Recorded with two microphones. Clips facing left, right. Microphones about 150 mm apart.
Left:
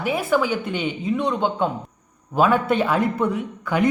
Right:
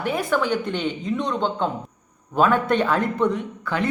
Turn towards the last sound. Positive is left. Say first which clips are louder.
# left 4 dB
turn(degrees=15)  # may be behind; listen again after turning